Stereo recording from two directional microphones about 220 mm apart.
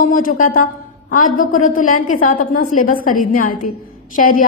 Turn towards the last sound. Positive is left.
turn(degrees=40)  # may be behind; listen again after turning